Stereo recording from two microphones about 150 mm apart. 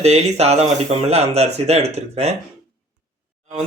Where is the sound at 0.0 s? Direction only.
45° right (ahead or behind).